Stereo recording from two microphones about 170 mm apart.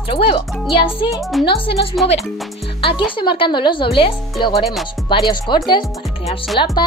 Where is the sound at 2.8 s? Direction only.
30° left (ahead or behind).